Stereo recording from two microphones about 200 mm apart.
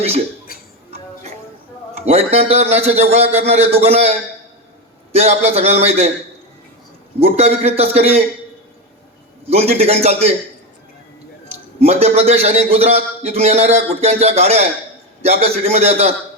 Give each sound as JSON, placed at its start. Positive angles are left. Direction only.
{"t": 2.0, "sound": "a man's voice", "side_deg": -30}
{"t": 5.1, "sound": "a man's voice", "side_deg": -30}
{"t": 7.3, "sound": "a man's voice", "side_deg": -30}
{"t": 9.5, "sound": "a man's voice", "side_deg": -30}
{"t": 11.8, "sound": "a man's voice", "side_deg": -30}